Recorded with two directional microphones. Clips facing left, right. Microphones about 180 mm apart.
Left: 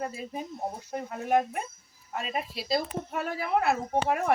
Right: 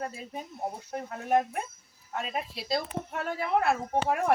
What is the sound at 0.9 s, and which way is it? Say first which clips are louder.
Speech: left 1 dB; 5° left (ahead or behind).